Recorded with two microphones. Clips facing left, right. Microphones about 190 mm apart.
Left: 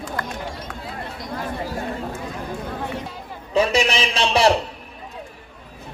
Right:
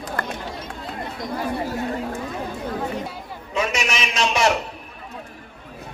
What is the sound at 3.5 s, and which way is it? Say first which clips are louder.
A man's voice: left 6 dB; 35° left (ahead or behind).